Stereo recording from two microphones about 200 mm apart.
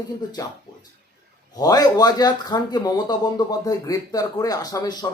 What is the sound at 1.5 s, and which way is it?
Speech, 20° left (ahead or behind).